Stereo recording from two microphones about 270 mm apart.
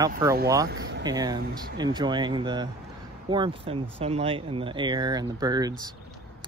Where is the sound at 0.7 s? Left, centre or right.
Right.